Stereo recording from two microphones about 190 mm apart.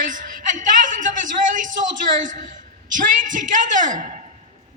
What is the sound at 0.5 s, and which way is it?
A woman's voice, 45° right (ahead or behind).